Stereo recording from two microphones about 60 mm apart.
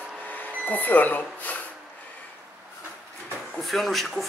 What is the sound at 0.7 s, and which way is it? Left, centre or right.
Speech, left.